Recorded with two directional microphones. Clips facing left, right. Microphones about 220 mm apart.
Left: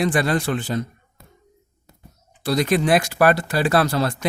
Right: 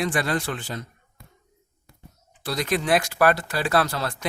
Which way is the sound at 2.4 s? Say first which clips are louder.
Left 7 dB; 35° left (ahead or behind).